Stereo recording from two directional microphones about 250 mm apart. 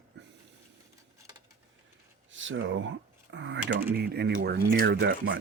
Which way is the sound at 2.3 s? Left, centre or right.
Right.